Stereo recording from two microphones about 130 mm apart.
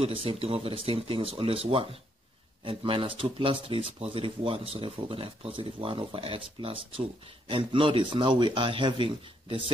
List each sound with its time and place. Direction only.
0.0 s speech: 45° right (ahead or behind)